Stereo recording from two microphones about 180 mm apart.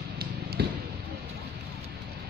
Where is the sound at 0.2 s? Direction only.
60° right (ahead or behind).